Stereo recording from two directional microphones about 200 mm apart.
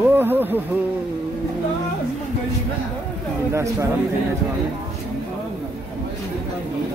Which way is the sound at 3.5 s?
15° right (ahead or behind).